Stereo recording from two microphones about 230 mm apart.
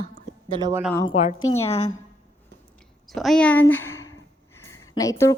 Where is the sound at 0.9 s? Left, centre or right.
Left.